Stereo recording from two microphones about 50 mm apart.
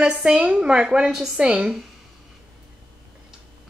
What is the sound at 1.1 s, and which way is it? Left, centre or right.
Speech, centre.